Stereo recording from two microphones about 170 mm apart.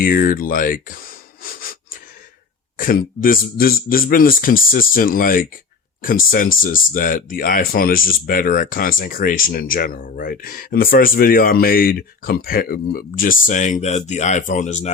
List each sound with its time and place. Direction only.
0.0 s speech: 55° left (ahead or behind)
2.7 s speech: 55° left (ahead or behind)